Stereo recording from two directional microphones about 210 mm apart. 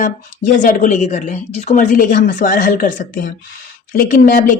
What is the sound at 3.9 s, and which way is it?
Speech, 40° left (ahead or behind).